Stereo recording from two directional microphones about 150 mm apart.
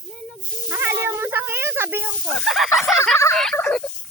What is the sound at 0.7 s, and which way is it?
Snake, 15° right (ahead or behind).